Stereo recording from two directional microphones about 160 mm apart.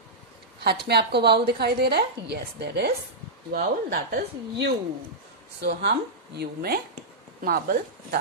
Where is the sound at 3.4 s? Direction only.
70° right (ahead or behind).